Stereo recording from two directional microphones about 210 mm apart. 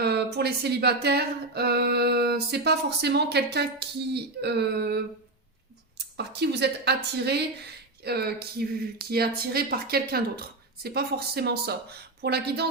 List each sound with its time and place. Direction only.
0.0 s speech: 50° right (ahead or behind)
6.1 s speech: 50° right (ahead or behind)